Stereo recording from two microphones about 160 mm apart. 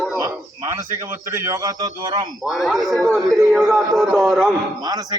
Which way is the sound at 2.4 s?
Centre (ahead or behind).